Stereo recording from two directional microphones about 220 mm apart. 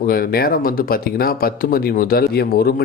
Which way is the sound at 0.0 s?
45° left (ahead or behind).